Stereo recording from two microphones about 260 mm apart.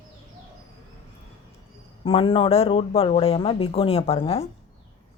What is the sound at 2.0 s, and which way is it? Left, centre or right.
A man's voice, left.